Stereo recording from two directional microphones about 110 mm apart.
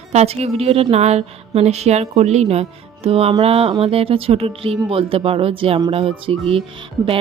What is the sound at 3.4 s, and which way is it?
Music, 60° right (ahead or behind).